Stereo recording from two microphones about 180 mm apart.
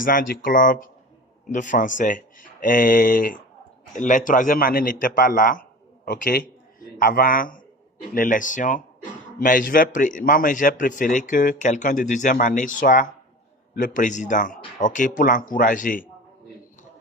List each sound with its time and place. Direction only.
0.0 s a man's voice: 50° left (ahead or behind)